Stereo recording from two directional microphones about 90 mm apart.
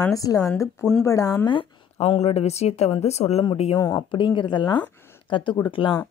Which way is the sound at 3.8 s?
55° left (ahead or behind).